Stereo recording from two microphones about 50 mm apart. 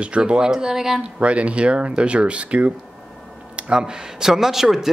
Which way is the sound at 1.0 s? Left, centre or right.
Right.